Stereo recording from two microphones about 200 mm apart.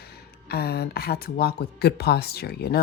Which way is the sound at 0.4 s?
50° left (ahead or behind).